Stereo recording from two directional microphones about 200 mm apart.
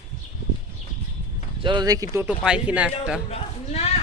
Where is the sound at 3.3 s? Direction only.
30° left (ahead or behind).